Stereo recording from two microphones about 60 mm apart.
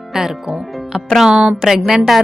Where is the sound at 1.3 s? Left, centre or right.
Centre.